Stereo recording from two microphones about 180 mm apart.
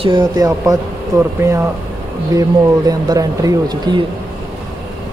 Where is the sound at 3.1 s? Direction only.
20° right (ahead or behind).